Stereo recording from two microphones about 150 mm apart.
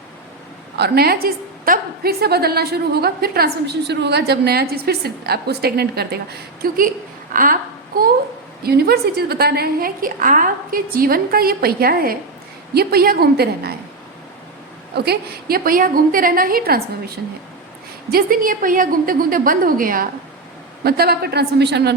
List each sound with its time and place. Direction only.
0.8 s a woman's voice: 90° right
8.6 s a woman's voice: 90° right
14.9 s a woman's voice: 90° right
18.1 s a woman's voice: 65° right (ahead or behind)
20.8 s a woman's voice: 90° right